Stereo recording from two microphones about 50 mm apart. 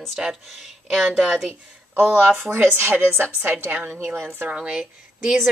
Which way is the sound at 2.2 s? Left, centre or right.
Right.